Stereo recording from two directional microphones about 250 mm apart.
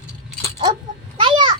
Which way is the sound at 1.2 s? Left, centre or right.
Centre.